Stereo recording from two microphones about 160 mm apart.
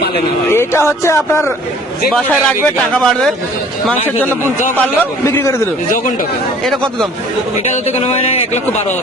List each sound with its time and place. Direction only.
0.5 s speech: 15° left (ahead or behind)
2.0 s a man's voice: 5° left (ahead or behind)
6.7 s a man's voice: 5° left (ahead or behind)
7.9 s speech: 45° left (ahead or behind)